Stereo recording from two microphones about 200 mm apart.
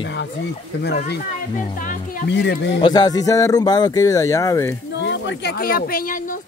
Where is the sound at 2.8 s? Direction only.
20° left (ahead or behind).